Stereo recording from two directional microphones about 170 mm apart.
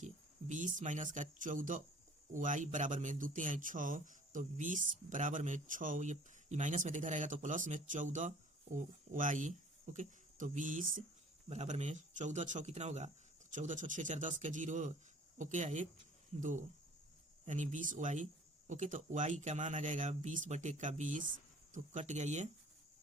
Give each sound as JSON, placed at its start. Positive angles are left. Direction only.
{"t": 0.0, "sound": "speech", "side_deg": -45}
{"t": 11.4, "sound": "speech", "side_deg": -40}